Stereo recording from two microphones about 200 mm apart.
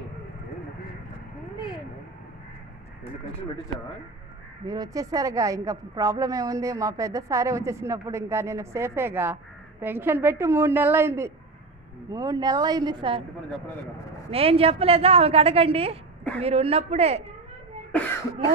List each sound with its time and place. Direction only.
4.6 s a woman's voice: 20° right (ahead or behind)
14.3 s a woman's voice: 30° right (ahead or behind)